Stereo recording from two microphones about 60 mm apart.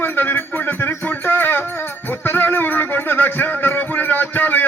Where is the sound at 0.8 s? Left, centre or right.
Left.